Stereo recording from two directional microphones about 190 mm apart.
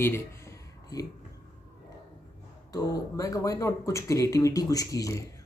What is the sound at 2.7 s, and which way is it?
Speech, 20° left (ahead or behind).